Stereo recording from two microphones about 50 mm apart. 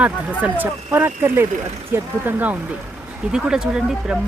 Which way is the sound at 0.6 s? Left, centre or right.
Right.